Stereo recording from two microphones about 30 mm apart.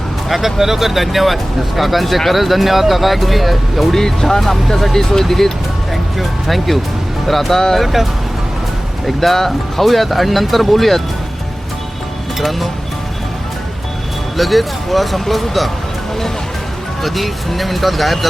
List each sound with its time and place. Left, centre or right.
0.3 s speech: centre
3.9 s speech: centre
9.0 s speech: centre
12.4 s speech: centre
14.3 s speech: centre
17.0 s speech: centre